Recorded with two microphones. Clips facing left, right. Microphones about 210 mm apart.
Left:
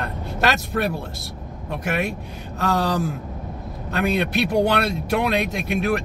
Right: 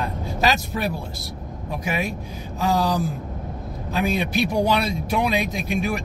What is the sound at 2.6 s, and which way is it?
Speech, 60° left (ahead or behind).